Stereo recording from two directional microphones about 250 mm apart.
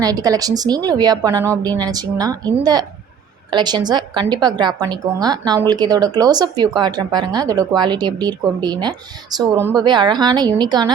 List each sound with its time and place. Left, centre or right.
0.0 s a woman's voice: centre